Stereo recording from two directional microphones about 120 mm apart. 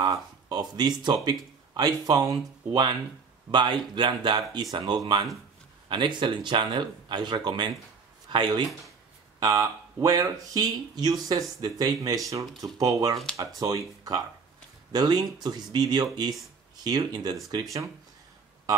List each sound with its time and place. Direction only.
0.0 s speech: 30° right (ahead or behind)